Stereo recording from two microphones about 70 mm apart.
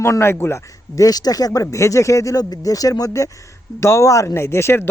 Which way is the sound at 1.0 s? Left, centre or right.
Left.